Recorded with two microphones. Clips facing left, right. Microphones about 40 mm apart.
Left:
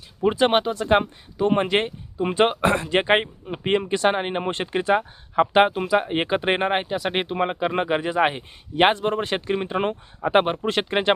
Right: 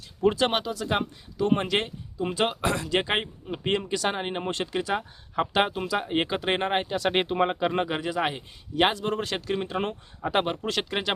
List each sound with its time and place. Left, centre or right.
0.2 s speech: left; by 7.7 s centre
7.7 s speech: left